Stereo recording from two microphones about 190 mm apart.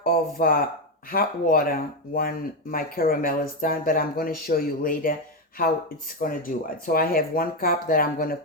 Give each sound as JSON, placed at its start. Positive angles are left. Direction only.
{"t": 0.0, "sound": "speech", "side_deg": 50}
{"t": 6.1, "sound": "speech", "side_deg": 45}